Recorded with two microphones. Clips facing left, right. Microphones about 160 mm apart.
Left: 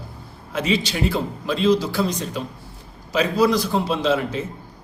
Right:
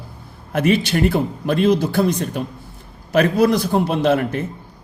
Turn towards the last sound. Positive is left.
turn(degrees=-55)  # may be behind; listen again after turning